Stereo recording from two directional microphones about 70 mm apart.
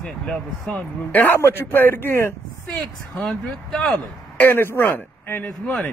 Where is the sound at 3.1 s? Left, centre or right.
Centre.